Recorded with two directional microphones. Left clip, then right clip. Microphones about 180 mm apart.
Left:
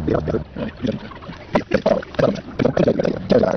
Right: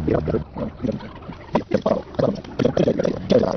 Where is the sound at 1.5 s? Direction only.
10° left (ahead or behind).